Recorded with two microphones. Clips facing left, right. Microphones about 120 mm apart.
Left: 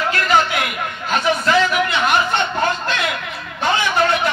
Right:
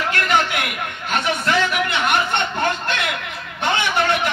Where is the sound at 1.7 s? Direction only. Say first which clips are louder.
Left 2 dB; 65° right (ahead or behind).